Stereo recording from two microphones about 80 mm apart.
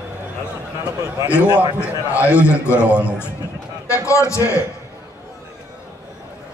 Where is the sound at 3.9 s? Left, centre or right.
Left.